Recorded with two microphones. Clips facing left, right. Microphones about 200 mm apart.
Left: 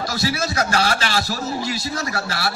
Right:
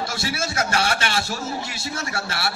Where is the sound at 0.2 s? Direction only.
25° right (ahead or behind).